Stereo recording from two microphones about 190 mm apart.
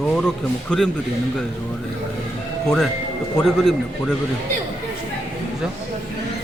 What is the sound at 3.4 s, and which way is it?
Speech, centre (ahead or behind).